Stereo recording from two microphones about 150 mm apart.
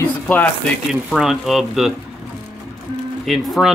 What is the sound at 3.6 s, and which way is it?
Speech, 5° right (ahead or behind).